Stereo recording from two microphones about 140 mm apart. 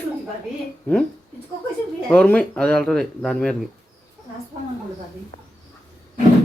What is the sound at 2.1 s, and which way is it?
Speech, 10° left (ahead or behind).